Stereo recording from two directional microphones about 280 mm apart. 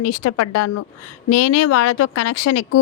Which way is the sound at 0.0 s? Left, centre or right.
Left.